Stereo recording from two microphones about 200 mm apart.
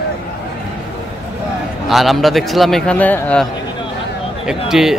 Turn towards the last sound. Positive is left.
turn(degrees=0)  # may be behind; listen again after turning